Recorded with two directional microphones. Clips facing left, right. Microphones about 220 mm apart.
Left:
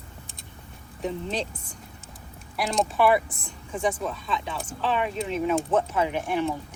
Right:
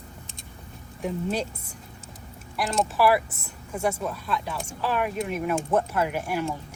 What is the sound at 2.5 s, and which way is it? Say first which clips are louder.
Speech: left 1 dB; centre (ahead or behind).